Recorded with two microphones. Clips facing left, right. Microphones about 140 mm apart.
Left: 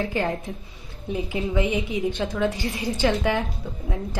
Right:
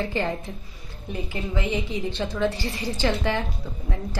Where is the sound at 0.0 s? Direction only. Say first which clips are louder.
Left 1 dB; 5° left (ahead or behind).